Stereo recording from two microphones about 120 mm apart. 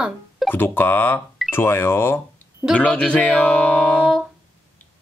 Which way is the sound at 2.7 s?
10° left (ahead or behind).